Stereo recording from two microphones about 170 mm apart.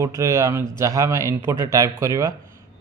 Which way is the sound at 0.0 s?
15° right (ahead or behind).